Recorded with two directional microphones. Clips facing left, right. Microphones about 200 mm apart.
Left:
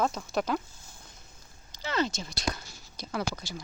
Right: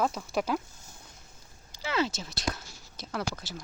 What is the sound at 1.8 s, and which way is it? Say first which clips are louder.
Speech: even; 5° right (ahead or behind).